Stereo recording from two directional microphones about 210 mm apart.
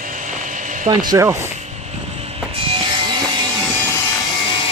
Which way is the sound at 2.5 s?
25° right (ahead or behind).